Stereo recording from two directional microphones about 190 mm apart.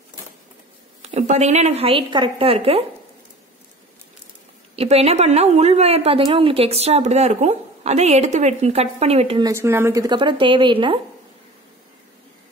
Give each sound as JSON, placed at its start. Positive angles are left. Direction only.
{"t": 1.0, "sound": "a woman's voice", "side_deg": -35}
{"t": 4.7, "sound": "a woman's voice", "side_deg": -35}
{"t": 9.4, "sound": "speech", "side_deg": -15}